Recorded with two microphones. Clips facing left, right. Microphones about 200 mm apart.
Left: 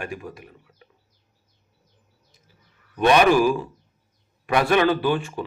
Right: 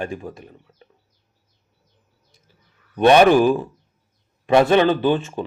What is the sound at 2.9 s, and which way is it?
A man's voice, 30° right (ahead or behind).